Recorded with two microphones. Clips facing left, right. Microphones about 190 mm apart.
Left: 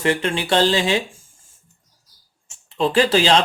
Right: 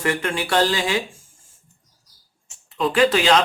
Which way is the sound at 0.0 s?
25° left (ahead or behind).